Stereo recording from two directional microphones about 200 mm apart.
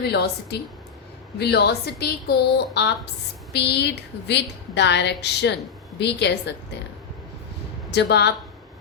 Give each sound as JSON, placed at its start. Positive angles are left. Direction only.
{"t": 0.0, "sound": "a woman's voice", "side_deg": 55}
{"t": 7.9, "sound": "a woman's voice", "side_deg": 55}